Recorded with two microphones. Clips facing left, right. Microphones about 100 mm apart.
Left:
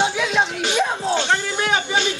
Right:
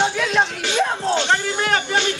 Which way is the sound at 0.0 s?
10° left (ahead or behind).